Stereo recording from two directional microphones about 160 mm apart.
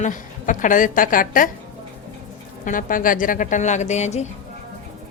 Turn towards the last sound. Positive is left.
turn(degrees=45)  # may be behind; listen again after turning